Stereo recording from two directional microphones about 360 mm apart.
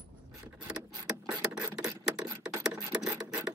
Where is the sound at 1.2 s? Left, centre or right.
Centre.